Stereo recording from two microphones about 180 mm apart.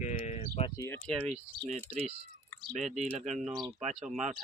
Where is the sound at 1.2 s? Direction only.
40° right (ahead or behind).